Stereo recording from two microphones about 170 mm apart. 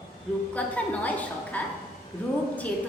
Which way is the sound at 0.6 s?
10° left (ahead or behind).